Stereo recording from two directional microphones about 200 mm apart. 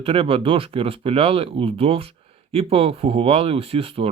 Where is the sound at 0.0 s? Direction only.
25° right (ahead or behind).